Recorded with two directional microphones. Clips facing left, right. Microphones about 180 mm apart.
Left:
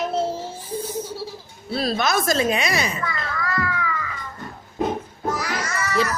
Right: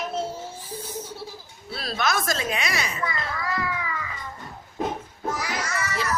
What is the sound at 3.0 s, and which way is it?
Children playing, 20° right (ahead or behind).